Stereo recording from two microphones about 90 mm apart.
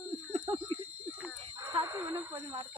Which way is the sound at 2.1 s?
40° right (ahead or behind).